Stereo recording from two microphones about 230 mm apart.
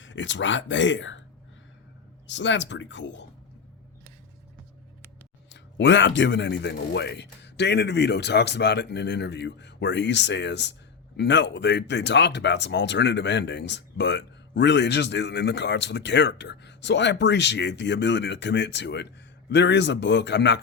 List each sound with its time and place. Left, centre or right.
0.0 s speech: left
2.2 s speech: left
5.5 s speech: left